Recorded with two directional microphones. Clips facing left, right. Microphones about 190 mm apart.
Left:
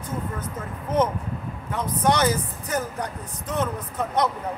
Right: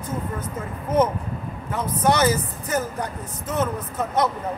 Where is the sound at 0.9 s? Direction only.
10° right (ahead or behind).